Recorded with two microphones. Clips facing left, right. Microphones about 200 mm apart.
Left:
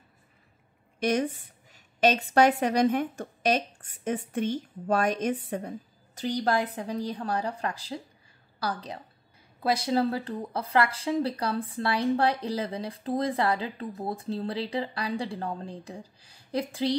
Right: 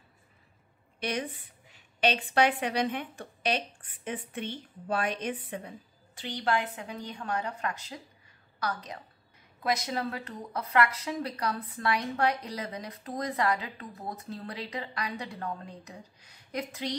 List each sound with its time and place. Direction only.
0.9 s a woman's voice: 45° left (ahead or behind)